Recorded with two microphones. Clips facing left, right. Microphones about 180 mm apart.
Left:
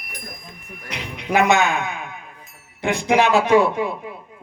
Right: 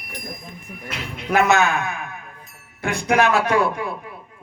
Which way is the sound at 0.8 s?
15° left (ahead or behind).